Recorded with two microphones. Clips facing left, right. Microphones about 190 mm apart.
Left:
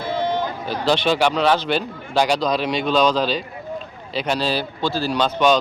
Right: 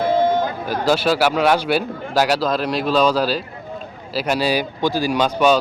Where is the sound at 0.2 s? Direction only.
50° right (ahead or behind).